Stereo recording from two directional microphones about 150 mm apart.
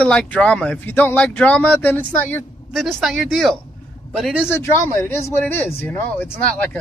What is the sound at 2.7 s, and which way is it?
A man's voice, centre (ahead or behind).